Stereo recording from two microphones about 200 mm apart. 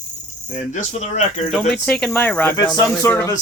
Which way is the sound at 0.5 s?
35° left (ahead or behind).